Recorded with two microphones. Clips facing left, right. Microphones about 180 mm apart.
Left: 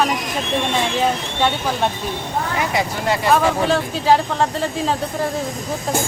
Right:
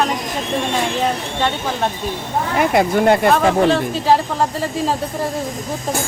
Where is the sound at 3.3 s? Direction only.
Centre (ahead or behind).